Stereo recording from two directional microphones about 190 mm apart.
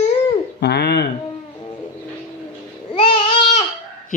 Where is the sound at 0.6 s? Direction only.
60° left (ahead or behind).